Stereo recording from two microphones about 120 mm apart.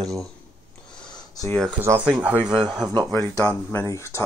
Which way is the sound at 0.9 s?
5° left (ahead or behind).